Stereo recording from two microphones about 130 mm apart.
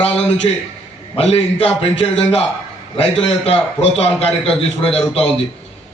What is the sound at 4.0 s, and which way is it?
Speech, 50° left (ahead or behind).